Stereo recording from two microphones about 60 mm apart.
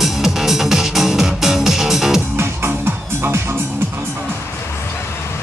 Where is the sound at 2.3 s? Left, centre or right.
Right.